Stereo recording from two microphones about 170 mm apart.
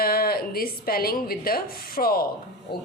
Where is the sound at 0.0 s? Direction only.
65° left (ahead or behind).